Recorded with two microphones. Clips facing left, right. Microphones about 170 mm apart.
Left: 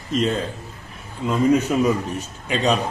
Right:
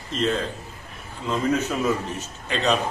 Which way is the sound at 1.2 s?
10° left (ahead or behind).